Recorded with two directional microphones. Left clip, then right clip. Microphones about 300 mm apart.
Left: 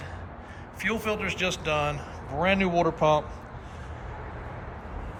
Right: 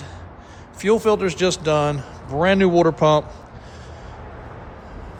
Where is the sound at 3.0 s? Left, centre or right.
Right.